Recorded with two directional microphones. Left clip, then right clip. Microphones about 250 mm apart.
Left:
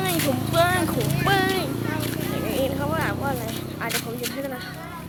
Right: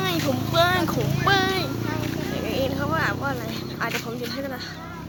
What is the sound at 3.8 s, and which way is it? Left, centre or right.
Speech, centre.